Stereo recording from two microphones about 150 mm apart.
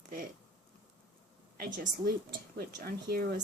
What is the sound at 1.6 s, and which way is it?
A woman's voice, 75° right (ahead or behind).